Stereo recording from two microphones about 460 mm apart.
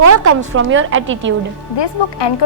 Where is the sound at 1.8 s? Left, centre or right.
Left.